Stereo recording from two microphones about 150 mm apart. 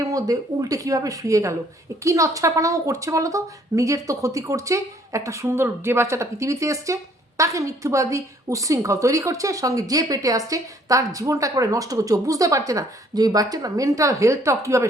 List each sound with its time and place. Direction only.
0.0 s a woman's voice: 20° right (ahead or behind)